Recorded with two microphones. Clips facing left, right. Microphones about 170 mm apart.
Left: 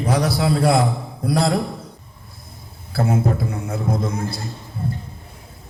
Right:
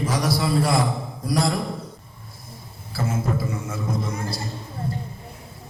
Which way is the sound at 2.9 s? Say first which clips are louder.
Left 5 dB; 65° left (ahead or behind).